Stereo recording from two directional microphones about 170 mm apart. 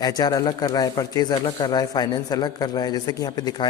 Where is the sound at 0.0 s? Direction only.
20° left (ahead or behind).